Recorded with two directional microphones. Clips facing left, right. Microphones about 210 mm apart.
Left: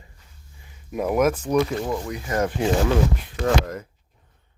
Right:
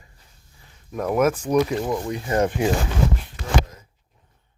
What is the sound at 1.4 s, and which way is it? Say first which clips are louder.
Speech: right 1 dB; 10° right (ahead or behind).